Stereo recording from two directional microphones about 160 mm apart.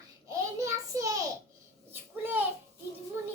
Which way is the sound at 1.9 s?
10° right (ahead or behind).